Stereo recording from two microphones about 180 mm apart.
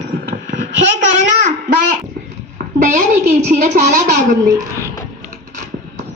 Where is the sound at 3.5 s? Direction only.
45° right (ahead or behind).